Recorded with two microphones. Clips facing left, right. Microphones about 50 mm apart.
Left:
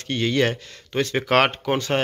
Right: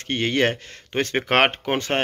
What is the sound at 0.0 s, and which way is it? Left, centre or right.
Speech, right.